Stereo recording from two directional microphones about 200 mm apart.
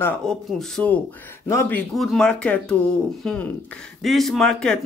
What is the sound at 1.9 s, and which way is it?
Speech, centre (ahead or behind).